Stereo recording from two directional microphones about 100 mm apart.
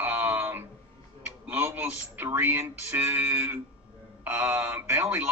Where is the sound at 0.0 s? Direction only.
20° right (ahead or behind).